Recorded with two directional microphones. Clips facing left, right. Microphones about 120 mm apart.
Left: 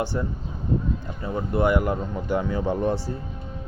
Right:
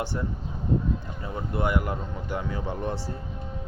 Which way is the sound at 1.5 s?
50° left (ahead or behind).